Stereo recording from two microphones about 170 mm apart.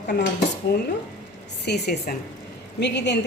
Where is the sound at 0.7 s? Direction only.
70° left (ahead or behind).